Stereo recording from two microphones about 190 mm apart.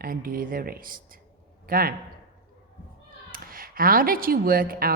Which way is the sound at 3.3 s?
50° right (ahead or behind).